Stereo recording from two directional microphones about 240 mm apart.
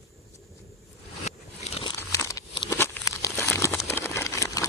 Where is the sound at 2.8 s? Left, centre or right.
Centre.